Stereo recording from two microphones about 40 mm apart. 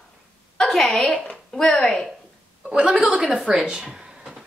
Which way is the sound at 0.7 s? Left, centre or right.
Centre.